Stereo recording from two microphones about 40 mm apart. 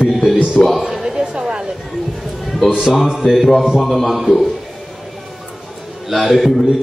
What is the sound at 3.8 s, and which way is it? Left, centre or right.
Speech, centre.